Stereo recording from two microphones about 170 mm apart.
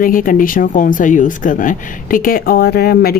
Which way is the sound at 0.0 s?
55° left (ahead or behind).